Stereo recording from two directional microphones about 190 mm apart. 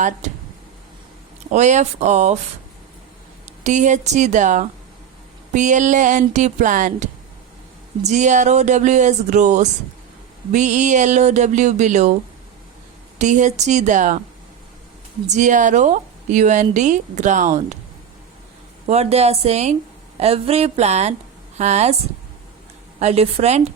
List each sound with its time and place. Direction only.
0.2 s a sound: 35° right (ahead or behind)
1.5 s a woman's voice: 40° right (ahead or behind)
3.6 s a woman's voice: 40° right (ahead or behind)
13.1 s a woman's voice: 40° right (ahead or behind)
15.3 s a woman's voice: 40° right (ahead or behind)
18.9 s a woman's voice: 35° right (ahead or behind)
23.0 s a woman's voice: 35° right (ahead or behind)